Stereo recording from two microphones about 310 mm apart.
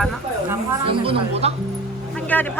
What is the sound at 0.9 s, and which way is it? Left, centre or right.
Speech, centre.